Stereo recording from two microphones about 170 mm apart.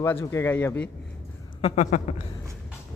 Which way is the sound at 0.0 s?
15° left (ahead or behind).